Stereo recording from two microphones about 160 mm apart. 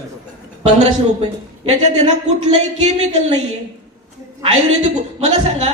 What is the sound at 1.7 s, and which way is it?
Speech, 45° right (ahead or behind).